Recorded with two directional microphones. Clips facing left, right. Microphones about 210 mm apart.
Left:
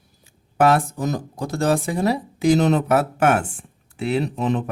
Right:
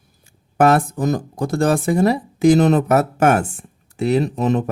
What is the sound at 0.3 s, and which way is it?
Speech, 50° right (ahead or behind).